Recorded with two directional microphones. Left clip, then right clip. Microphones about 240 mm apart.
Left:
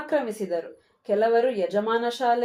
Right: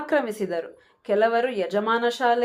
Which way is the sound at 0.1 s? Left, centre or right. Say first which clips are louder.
Right 1 dB; right.